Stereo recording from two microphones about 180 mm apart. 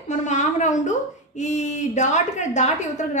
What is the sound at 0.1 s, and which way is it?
A woman's voice, 40° left (ahead or behind).